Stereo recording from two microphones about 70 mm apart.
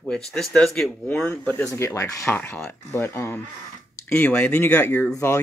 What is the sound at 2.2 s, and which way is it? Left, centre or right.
Speech, left.